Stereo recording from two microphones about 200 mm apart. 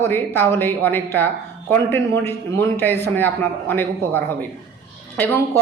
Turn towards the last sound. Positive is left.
turn(degrees=10)  # may be behind; listen again after turning